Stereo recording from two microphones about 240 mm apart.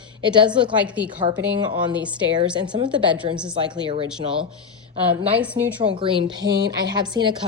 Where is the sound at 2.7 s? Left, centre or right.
Right.